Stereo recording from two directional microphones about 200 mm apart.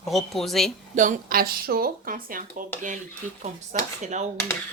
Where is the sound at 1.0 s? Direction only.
45° right (ahead or behind).